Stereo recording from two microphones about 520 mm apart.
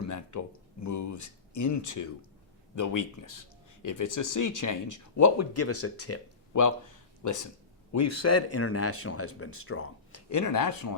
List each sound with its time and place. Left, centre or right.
0.0 s speech: left